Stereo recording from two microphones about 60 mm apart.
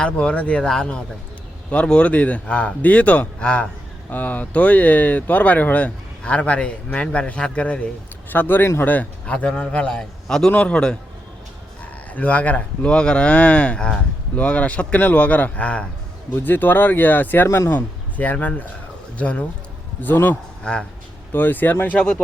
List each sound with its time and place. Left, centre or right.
0.0 s a man's voice: centre
8.3 s a man's voice: left; by 10.5 s centre
10.5 s a man's voice: left
12.1 s speech: left
17.4 s speech: left
17.7 s speech: left
20.7 s a man's voice: centre
21.3 s speech: left
21.9 s a man's voice: centre